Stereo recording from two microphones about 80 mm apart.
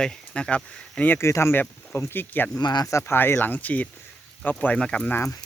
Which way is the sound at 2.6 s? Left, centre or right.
Left.